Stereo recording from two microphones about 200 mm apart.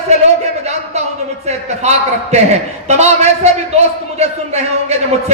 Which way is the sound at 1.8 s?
35° right (ahead or behind).